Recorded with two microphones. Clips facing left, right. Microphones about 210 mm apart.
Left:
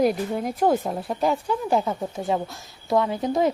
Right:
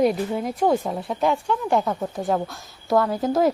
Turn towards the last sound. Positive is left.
turn(degrees=0)  # may be behind; listen again after turning